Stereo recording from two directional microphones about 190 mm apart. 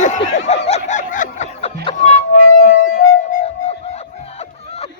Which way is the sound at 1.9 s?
40° left (ahead or behind).